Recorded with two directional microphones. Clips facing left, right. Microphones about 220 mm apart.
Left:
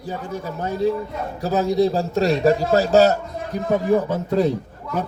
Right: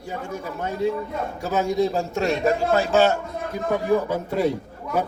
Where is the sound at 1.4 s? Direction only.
35° left (ahead or behind).